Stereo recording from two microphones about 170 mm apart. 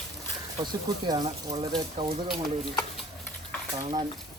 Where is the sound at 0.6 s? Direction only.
25° right (ahead or behind).